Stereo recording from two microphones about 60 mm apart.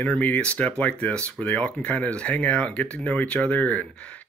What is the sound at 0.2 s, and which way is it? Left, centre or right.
Speech, left.